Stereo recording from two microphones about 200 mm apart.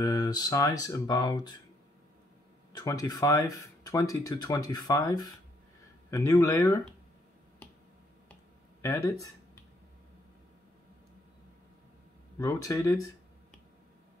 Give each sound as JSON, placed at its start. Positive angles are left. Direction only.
{"t": 0.0, "sound": "speech", "side_deg": 20}
{"t": 2.7, "sound": "speech", "side_deg": 20}
{"t": 8.8, "sound": "speech", "side_deg": 15}
{"t": 12.4, "sound": "speech", "side_deg": 20}